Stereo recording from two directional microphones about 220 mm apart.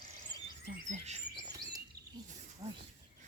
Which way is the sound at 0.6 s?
35° right (ahead or behind).